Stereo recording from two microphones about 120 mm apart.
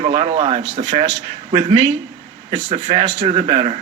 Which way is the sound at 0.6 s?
35° right (ahead or behind).